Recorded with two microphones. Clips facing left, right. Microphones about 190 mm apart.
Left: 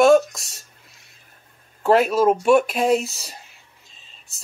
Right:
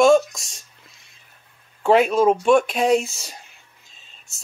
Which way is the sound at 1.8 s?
Centre (ahead or behind).